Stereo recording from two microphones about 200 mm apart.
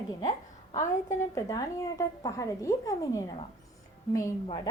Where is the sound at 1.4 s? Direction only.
15° left (ahead or behind).